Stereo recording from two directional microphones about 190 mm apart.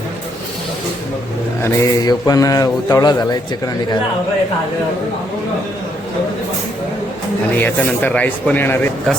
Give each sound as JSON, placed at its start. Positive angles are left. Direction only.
{"t": 1.6, "sound": "speech", "side_deg": 20}
{"t": 7.5, "sound": "speech", "side_deg": 10}